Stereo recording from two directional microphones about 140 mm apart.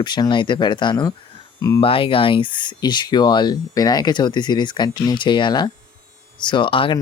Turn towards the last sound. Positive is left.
turn(degrees=40)  # may be behind; listen again after turning